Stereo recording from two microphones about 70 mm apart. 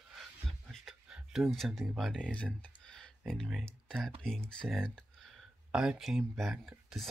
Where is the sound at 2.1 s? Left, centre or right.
Centre.